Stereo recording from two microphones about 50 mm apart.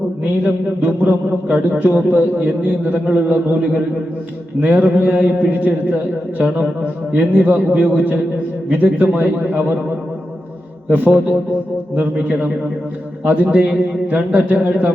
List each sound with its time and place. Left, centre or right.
0.4 s a man's voice: right
10.8 s a man's voice: right